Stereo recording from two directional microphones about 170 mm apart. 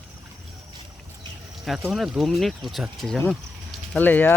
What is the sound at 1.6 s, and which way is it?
Speech, centre (ahead or behind).